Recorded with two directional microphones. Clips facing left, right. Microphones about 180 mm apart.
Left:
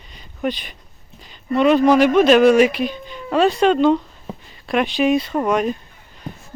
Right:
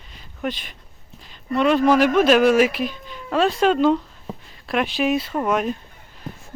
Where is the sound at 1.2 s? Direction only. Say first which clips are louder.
Left 3 dB; centre (ahead or behind).